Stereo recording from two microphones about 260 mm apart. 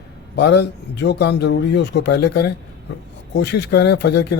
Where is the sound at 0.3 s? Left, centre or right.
Left.